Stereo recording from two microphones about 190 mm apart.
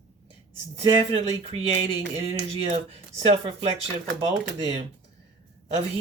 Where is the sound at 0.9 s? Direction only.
30° right (ahead or behind).